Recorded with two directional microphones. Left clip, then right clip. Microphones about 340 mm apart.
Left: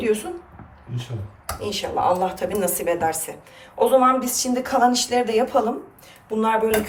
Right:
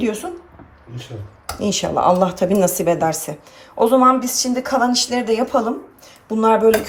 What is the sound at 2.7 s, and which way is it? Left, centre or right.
Speech, centre.